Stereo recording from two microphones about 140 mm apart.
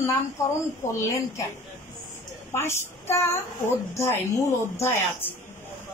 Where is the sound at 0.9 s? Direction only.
20° left (ahead or behind).